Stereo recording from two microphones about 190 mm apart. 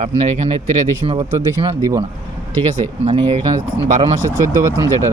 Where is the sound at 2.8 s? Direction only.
30° right (ahead or behind).